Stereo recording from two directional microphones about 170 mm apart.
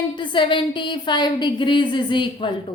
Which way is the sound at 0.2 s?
30° left (ahead or behind).